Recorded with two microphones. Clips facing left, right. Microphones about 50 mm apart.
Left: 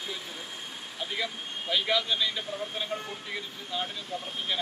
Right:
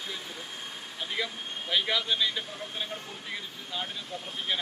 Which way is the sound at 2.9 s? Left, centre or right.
Left.